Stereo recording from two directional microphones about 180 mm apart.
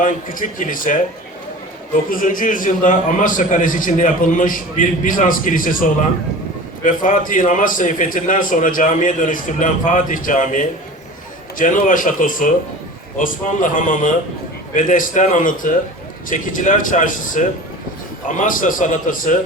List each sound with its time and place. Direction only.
0.0 s a man's voice: 50° left (ahead or behind)
2.0 s a man's voice: 50° left (ahead or behind)